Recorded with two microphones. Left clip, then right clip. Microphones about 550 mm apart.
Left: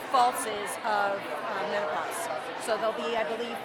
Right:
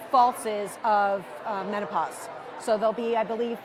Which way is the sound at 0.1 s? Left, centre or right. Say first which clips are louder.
Right 3 dB; right.